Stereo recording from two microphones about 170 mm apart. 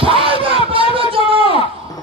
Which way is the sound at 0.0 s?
30° right (ahead or behind).